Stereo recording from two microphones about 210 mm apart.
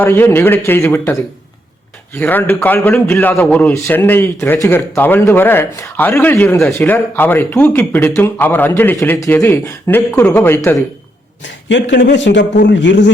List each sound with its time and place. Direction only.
0.0 s a man's voice: 10° left (ahead or behind)
2.1 s a man's voice: 10° left (ahead or behind)
11.4 s a man's voice: 60° left (ahead or behind)